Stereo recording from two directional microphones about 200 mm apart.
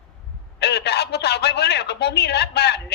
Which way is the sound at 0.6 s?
55° left (ahead or behind).